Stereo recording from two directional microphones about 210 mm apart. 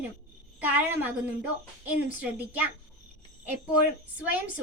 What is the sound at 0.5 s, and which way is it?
Speech, 5° right (ahead or behind).